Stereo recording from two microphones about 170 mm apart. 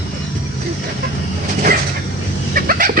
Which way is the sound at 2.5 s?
55° right (ahead or behind).